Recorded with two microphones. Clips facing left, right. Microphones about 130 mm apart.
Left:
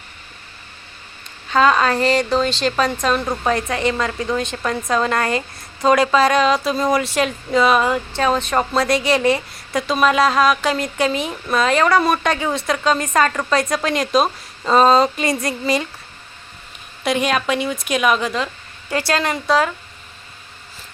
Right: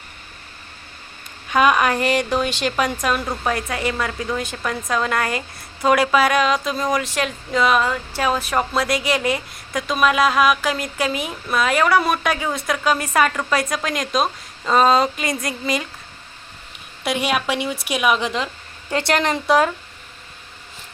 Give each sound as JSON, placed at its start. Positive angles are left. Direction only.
{"t": 1.5, "sound": "a woman's voice", "side_deg": -15}
{"t": 17.0, "sound": "a woman's voice", "side_deg": -5}
{"t": 18.2, "sound": "speech", "side_deg": -20}